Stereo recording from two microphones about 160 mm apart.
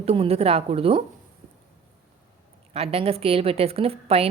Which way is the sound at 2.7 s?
40° right (ahead or behind).